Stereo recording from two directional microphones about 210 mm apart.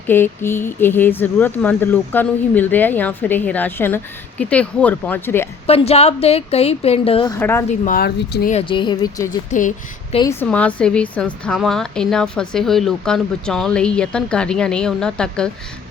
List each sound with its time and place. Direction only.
0.1 s speech: 10° left (ahead or behind)
5.6 s a woman's voice: 30° left (ahead or behind)
7.3 s speech: 10° left (ahead or behind)
7.7 s speech: 40° left (ahead or behind)
8.5 s a woman's voice: 25° left (ahead or behind)
9.5 s a woman's voice: 35° left (ahead or behind)
10.4 s a woman's voice: 5° left (ahead or behind)